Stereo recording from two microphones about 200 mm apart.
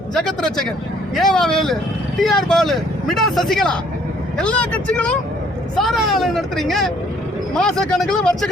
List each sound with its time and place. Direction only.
0.1 s a man's voice: centre (ahead or behind)